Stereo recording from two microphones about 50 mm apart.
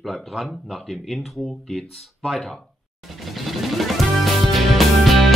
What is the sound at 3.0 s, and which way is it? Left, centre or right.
Music, centre.